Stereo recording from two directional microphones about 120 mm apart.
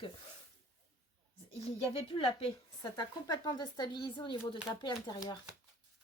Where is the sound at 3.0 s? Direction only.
30° left (ahead or behind).